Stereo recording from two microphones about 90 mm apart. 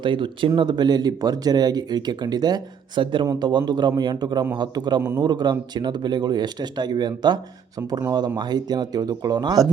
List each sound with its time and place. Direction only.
0.0 s speech: 65° right (ahead or behind)
3.3 s speech: 50° right (ahead or behind)
8.4 s speech: 50° right (ahead or behind)